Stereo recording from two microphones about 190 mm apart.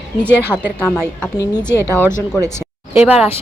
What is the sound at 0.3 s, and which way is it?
A woman's voice, 10° right (ahead or behind).